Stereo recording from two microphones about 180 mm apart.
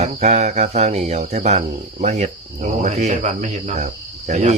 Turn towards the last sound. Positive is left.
turn(degrees=-40)  # may be behind; listen again after turning